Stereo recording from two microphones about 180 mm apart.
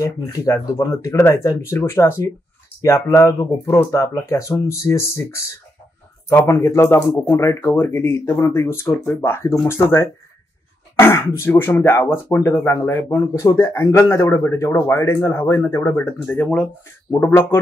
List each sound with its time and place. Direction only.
0.0 s speech: 20° left (ahead or behind)